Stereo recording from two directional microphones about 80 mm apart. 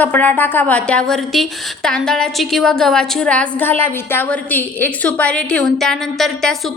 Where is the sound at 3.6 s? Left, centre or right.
Left; by 5.7 s centre.